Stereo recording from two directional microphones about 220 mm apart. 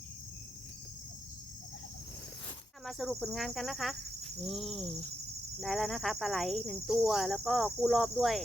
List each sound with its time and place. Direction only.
2.8 s insect: centre (ahead or behind)